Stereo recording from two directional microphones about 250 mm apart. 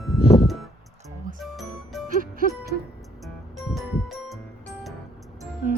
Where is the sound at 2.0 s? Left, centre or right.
Right.